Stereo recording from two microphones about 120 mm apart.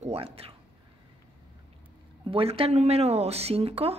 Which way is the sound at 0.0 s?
55° right (ahead or behind).